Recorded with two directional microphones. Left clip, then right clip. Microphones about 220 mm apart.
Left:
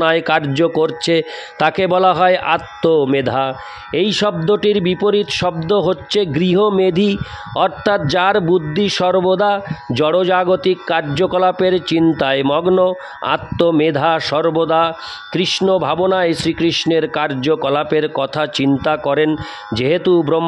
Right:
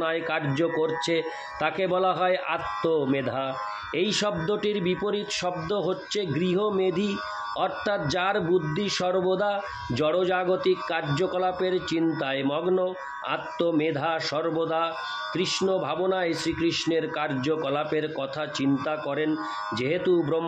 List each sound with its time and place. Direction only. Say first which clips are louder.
0.0 s speech: left 12 dB; 45° left (ahead or behind)